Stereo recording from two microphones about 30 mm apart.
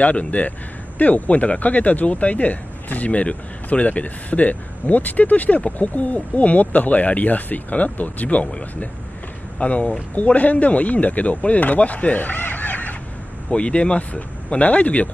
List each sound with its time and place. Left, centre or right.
0.0 s speech: left
9.6 s speech: left
13.5 s speech: left